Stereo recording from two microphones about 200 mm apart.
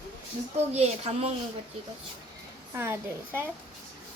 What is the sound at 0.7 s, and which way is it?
Speech, 30° right (ahead or behind).